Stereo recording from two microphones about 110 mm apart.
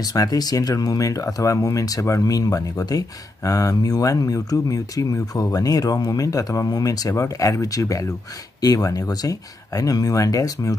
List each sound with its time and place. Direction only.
0.0 s speech: 35° left (ahead or behind)